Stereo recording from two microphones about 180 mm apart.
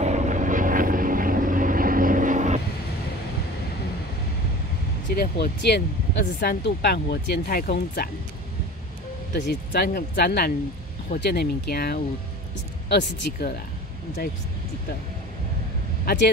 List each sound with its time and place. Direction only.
0.0 s vehicle: 40° right (ahead or behind)
5.1 s speech: 60° left (ahead or behind)
9.3 s speech: 60° left (ahead or behind)